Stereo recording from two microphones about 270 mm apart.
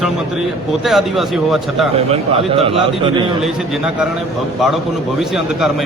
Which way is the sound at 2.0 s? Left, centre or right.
Right.